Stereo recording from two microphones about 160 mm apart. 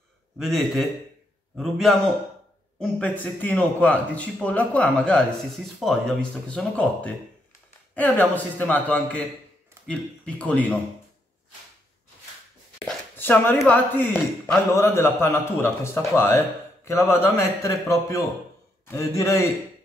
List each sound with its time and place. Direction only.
0.4 s a man's voice: centre (ahead or behind)
13.1 s a man's voice: 15° left (ahead or behind)